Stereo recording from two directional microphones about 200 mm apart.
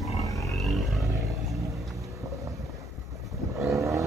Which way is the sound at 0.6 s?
Centre (ahead or behind).